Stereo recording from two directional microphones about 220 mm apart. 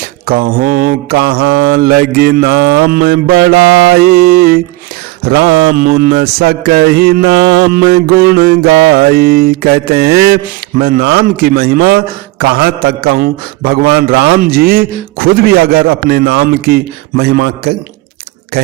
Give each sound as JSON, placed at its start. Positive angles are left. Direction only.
{"t": 0.3, "sound": "a man's voice", "side_deg": -40}